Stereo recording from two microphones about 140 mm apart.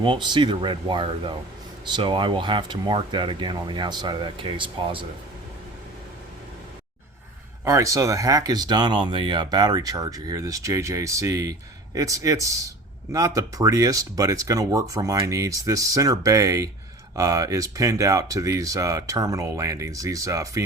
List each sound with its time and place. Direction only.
0.0 s speech: 35° right (ahead or behind)
7.6 s speech: 20° right (ahead or behind)